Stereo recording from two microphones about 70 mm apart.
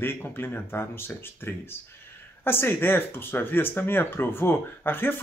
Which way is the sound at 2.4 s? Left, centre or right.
Left.